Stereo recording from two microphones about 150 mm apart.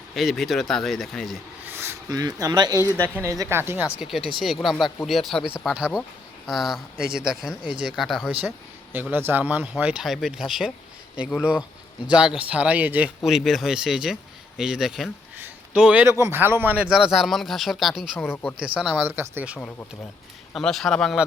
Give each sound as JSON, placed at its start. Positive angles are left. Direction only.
{"t": 0.1, "sound": "speech", "side_deg": 0}
{"t": 1.6, "sound": "speech", "side_deg": -15}
{"t": 2.9, "sound": "speech", "side_deg": 10}
{"t": 3.2, "sound": "speech", "side_deg": -20}
{"t": 3.9, "sound": "speech", "side_deg": 0}
{"t": 8.4, "sound": "speech", "side_deg": -15}
{"t": 12.1, "sound": "speech", "side_deg": -5}
{"t": 15.4, "sound": "a sound", "side_deg": -10}
{"t": 16.2, "sound": "speech", "side_deg": -15}
{"t": 18.2, "sound": "speech", "side_deg": 10}
{"t": 18.6, "sound": "speech", "side_deg": -5}
{"t": 20.5, "sound": "speech", "side_deg": 0}